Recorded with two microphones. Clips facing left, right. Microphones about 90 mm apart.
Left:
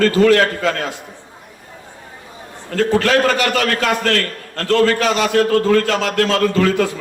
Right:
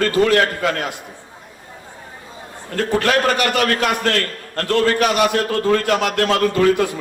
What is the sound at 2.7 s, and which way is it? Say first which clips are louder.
A man's voice: left 3 dB; 20° right (ahead or behind).